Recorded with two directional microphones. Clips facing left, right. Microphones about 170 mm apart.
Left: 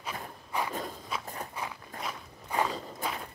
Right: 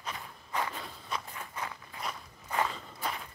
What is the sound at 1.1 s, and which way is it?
Walk, 5° left (ahead or behind).